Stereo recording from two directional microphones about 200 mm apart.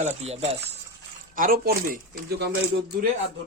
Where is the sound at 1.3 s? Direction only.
45° right (ahead or behind).